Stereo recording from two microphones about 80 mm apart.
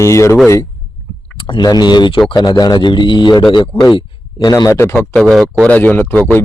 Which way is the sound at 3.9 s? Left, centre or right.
Left.